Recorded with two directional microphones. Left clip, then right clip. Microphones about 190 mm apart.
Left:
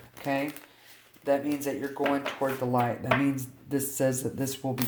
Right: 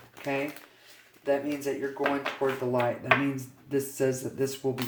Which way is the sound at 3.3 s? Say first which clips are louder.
Right 2 dB; 50° left (ahead or behind).